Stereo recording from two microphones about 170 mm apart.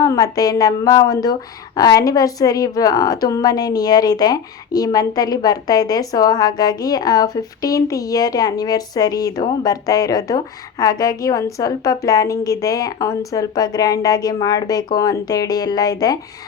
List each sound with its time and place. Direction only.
0.0 s speech: 20° left (ahead or behind)